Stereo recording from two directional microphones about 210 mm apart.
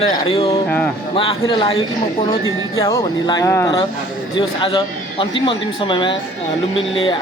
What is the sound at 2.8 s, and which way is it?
Speech, 15° left (ahead or behind).